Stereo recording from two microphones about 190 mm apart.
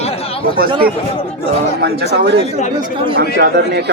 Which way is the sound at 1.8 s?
60° right (ahead or behind).